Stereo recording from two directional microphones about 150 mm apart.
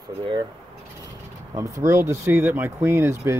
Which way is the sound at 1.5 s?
20° right (ahead or behind).